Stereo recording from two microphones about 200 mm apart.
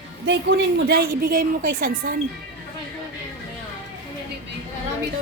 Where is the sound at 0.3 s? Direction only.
55° right (ahead or behind).